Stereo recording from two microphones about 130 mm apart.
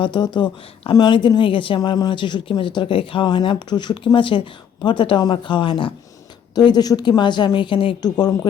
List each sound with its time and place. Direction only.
0.0 s speech: 35° left (ahead or behind)